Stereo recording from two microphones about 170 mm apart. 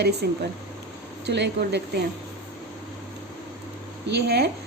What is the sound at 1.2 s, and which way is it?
Speech, 85° right.